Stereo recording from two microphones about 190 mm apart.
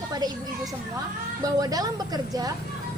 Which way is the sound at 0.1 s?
20° right (ahead or behind).